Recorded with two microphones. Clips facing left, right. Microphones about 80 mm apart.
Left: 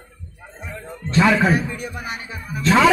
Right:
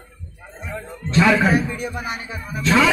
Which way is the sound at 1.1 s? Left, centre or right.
Centre.